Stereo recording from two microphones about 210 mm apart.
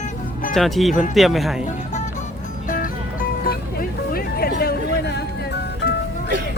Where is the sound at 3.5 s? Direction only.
45° left (ahead or behind).